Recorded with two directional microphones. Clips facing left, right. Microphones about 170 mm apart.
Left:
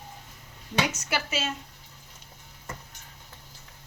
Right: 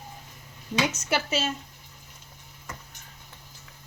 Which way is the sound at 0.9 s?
25° right (ahead or behind).